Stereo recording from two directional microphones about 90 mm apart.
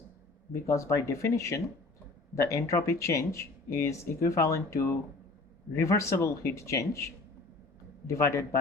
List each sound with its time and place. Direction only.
0.5 s speech: 30° left (ahead or behind)